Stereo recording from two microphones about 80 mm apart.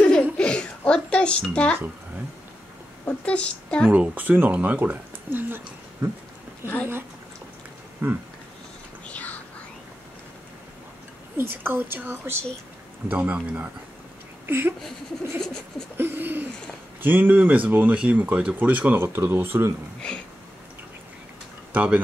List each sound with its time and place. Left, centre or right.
0.0 s a sound: centre
1.5 s a woman's voice: centre
3.1 s a woman's voice: centre
3.9 s speech: right
6.0 s speech: right
6.6 s speech: right
8.0 s speech: right
9.0 s a sound: centre
11.3 s speech: right
13.1 s speech: centre
14.4 s a sound: right
16.0 s speech: right
21.7 s speech: centre